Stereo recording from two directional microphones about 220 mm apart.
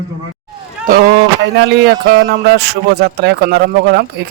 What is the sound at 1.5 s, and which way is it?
A man's voice, 50° right (ahead or behind).